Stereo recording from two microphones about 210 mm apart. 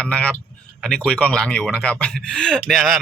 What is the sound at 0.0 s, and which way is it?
Speech, 5° left (ahead or behind).